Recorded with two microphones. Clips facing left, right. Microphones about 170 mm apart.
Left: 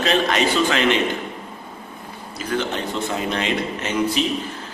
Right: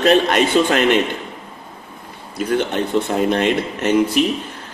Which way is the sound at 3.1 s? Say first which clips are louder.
Right 6 dB; 55° right (ahead or behind).